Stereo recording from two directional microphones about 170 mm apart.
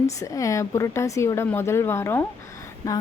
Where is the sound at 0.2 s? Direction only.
20° left (ahead or behind).